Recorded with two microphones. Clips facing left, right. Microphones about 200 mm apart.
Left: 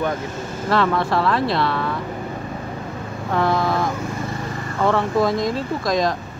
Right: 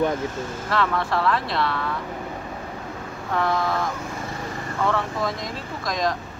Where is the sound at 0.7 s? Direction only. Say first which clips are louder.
Left 5 dB; 35° left (ahead or behind).